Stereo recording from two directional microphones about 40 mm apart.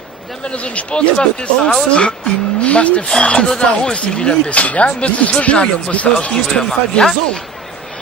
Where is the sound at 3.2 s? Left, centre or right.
Left.